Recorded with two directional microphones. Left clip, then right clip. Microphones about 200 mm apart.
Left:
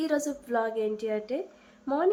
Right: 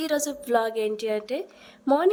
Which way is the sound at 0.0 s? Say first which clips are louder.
Right 2 dB; 40° right (ahead or behind).